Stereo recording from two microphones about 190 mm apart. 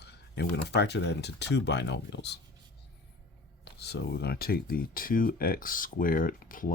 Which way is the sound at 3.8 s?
60° left (ahead or behind).